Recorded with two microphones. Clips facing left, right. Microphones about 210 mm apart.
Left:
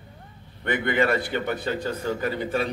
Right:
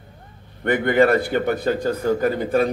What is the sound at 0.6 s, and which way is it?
Speech, 45° right (ahead or behind).